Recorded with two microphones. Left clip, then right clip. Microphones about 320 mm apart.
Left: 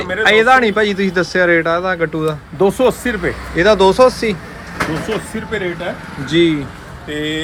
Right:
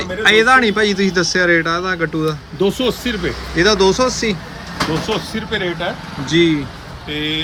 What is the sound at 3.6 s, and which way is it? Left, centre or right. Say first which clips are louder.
Speech: left 2 dB; centre.